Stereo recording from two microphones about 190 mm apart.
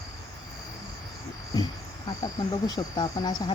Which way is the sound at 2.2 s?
20° left (ahead or behind).